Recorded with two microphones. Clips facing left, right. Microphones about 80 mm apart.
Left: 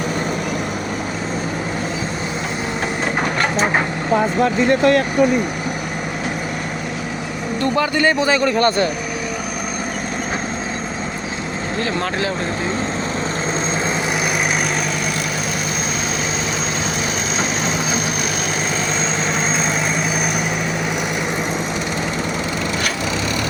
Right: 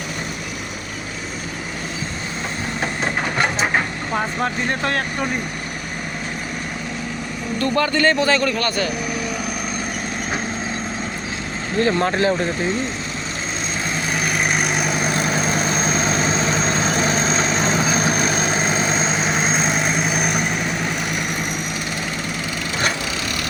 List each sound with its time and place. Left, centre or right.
7.8 s a man's voice: centre
8.5 s speech: left
11.8 s speech: right
15.0 s vehicle: right; by 20.4 s centre